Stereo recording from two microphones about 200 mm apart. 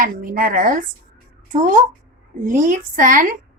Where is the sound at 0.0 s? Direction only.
45° right (ahead or behind).